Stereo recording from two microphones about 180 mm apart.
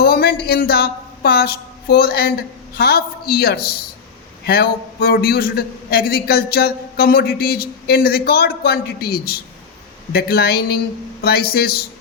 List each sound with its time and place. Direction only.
0.0 s a man's voice: 60° left (ahead or behind)